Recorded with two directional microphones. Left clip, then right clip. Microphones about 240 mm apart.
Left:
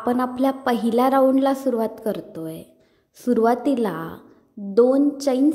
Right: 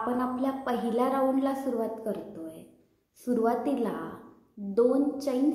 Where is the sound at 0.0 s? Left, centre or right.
Left.